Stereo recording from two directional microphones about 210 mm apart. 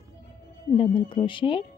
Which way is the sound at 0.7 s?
25° left (ahead or behind).